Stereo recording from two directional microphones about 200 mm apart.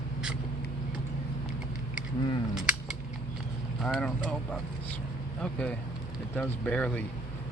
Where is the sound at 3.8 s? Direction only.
Centre (ahead or behind).